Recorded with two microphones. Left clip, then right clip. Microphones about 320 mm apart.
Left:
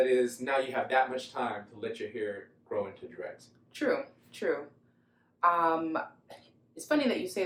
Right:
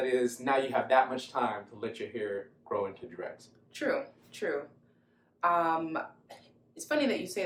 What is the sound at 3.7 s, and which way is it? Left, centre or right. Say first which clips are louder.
A woman's voice: left 1 dB; centre.